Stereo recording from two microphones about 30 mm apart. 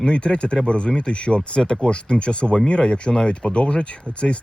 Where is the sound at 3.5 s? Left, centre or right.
Left.